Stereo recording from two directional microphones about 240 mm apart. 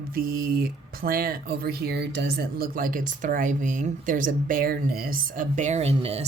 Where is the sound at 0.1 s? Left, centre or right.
Right.